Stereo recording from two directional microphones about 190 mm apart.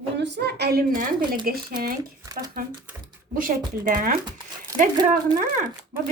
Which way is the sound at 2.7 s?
15° right (ahead or behind).